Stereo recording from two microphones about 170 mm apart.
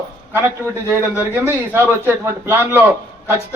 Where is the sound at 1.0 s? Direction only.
15° right (ahead or behind).